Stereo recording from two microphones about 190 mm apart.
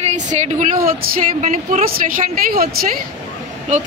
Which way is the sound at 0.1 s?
40° right (ahead or behind).